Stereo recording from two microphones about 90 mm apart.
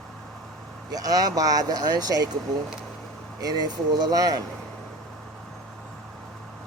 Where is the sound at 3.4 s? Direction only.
45° right (ahead or behind).